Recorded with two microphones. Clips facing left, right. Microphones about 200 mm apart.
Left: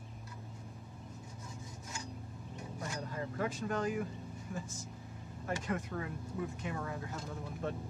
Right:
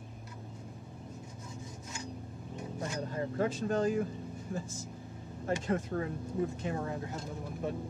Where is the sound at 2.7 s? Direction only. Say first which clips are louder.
Right 5 dB; 25° right (ahead or behind).